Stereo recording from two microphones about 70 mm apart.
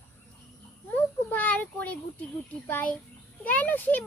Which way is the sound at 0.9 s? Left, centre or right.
Left.